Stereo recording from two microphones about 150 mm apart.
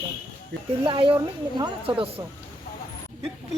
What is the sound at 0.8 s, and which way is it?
Speech, 35° right (ahead or behind).